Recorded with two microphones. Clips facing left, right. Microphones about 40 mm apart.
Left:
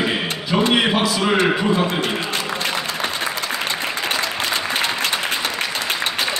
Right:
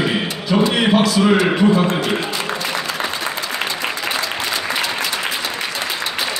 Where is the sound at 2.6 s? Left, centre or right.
Left.